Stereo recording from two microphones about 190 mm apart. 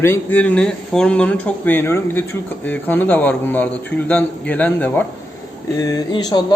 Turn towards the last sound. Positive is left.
turn(degrees=20)  # may be behind; listen again after turning